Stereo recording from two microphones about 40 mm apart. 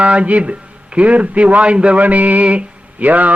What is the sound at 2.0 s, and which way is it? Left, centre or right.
Mantra, right.